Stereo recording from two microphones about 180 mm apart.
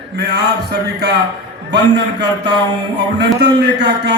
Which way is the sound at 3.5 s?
70° right (ahead or behind).